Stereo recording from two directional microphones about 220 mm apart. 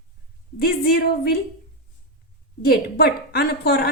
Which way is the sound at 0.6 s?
45° left (ahead or behind).